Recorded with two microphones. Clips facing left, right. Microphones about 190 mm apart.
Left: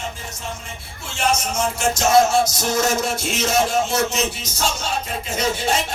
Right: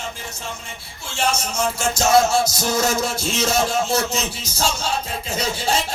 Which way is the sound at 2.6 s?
30° right (ahead or behind).